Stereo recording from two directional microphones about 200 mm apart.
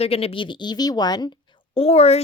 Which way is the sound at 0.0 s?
30° left (ahead or behind).